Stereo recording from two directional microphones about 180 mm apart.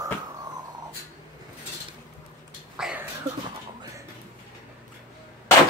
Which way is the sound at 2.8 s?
5° right (ahead or behind).